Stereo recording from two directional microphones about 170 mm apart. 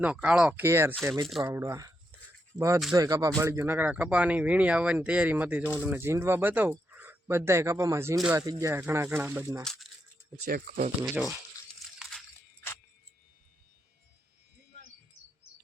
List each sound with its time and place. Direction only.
0.0 s speech: 10° right (ahead or behind)
10.4 s speech: 60° right (ahead or behind)
11.1 s speech: 5° right (ahead or behind)
11.9 s a sound: 5° left (ahead or behind)